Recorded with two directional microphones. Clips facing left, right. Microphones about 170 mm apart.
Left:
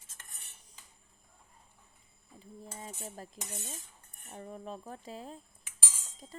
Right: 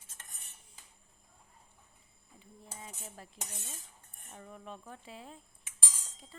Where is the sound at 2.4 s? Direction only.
40° left (ahead or behind).